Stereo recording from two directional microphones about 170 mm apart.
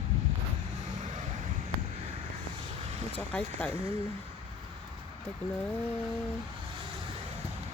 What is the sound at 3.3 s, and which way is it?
Speech, 10° left (ahead or behind).